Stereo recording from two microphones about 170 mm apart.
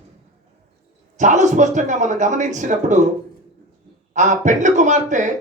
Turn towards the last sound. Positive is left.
turn(degrees=-45)  # may be behind; listen again after turning